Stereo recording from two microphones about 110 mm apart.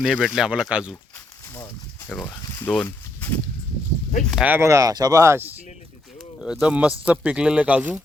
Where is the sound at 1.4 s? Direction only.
25° left (ahead or behind).